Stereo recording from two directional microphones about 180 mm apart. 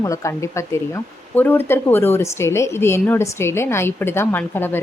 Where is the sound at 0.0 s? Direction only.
15° left (ahead or behind).